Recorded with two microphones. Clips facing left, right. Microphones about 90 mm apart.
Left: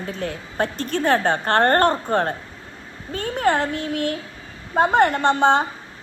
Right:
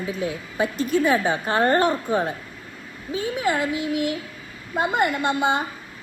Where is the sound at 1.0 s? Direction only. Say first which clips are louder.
Left 2 dB; 65° left (ahead or behind).